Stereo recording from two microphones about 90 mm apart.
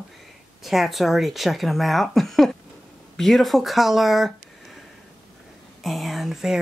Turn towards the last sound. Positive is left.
turn(degrees=-5)  # may be behind; listen again after turning